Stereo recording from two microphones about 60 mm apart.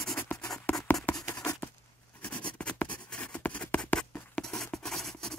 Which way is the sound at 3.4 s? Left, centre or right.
Left.